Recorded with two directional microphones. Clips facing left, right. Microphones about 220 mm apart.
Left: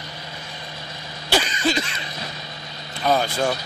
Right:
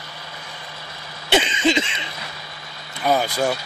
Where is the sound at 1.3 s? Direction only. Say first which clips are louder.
Right 3 dB; 20° right (ahead or behind).